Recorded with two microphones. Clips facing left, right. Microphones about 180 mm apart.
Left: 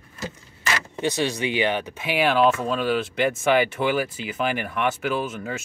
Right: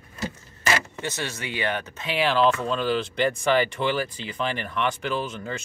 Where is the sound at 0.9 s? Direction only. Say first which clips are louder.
Left 7 dB; 15° left (ahead or behind).